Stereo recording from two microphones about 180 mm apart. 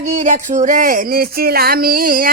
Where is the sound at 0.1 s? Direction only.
40° right (ahead or behind).